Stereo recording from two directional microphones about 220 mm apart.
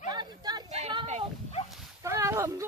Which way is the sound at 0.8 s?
30° right (ahead or behind).